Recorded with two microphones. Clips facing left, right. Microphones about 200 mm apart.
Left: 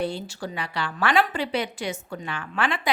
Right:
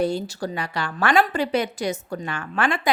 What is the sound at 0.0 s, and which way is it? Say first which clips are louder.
A woman's voice: right 5 dB; 40° right (ahead or behind).